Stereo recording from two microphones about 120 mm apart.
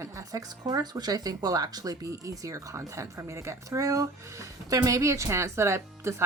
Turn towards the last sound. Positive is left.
turn(degrees=-20)  # may be behind; listen again after turning